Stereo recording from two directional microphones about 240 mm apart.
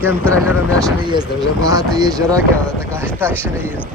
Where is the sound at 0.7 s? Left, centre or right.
Centre.